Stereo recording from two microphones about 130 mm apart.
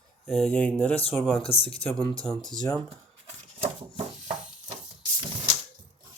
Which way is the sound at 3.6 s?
50° right (ahead or behind).